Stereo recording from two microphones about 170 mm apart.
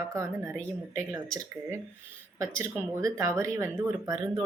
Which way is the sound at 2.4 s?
15° right (ahead or behind).